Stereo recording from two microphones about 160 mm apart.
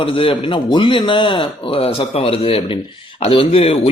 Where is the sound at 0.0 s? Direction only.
35° left (ahead or behind).